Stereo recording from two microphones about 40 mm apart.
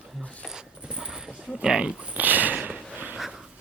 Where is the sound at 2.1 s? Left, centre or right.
Right.